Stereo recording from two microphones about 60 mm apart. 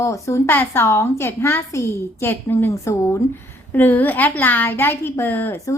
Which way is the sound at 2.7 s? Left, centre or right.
Left.